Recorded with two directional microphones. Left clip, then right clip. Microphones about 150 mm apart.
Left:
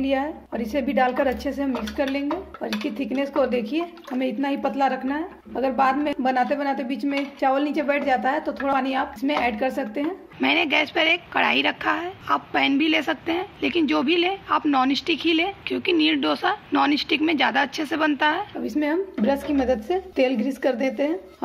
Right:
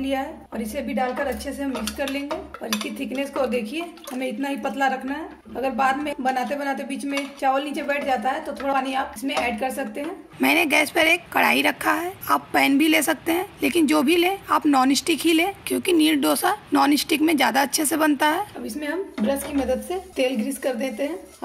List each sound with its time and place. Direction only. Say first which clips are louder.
0.0 s a woman's voice: left 2 dB; 25° left (ahead or behind); by 1.5 s 40° left (ahead or behind)
1.6 s dishes: left 2 dB; 25° left (ahead or behind)
10.4 s speech: right 2 dB; 15° right (ahead or behind)
18.8 s dishes: left 4 dB; 30° left (ahead or behind)